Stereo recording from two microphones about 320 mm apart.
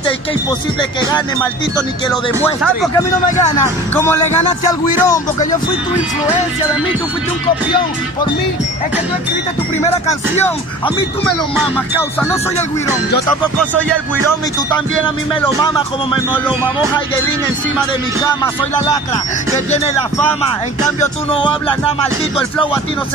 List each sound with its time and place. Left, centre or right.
1.8 s speech: centre
3.9 s speech: centre
11.5 s music: centre
15.4 s speech: centre
17.7 s speech: centre
21.0 s speech: centre